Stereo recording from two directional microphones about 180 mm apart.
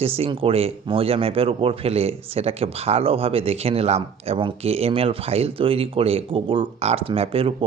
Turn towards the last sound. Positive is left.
turn(degrees=-30)  # may be behind; listen again after turning